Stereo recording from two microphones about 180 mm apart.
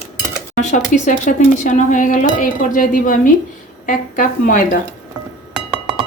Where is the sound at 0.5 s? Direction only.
45° left (ahead or behind).